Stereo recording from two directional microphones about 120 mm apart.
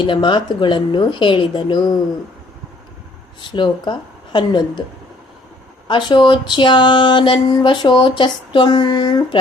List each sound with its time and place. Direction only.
0.0 s speech: 40° left (ahead or behind)
3.4 s speech: 40° left (ahead or behind)
5.9 s speech: 40° left (ahead or behind)